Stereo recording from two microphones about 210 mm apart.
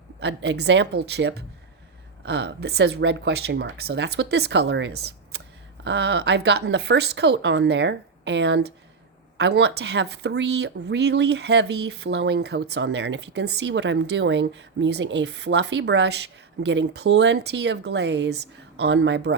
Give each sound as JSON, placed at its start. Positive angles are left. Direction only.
{"t": 0.2, "sound": "speech", "side_deg": -55}